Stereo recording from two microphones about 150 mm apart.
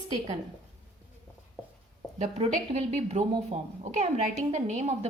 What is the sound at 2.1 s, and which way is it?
Speech, 45° right (ahead or behind).